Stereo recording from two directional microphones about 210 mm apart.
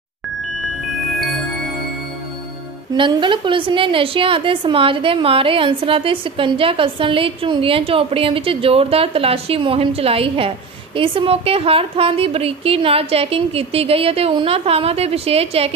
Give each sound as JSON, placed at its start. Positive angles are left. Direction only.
{"t": 2.9, "sound": "a woman's voice", "side_deg": -20}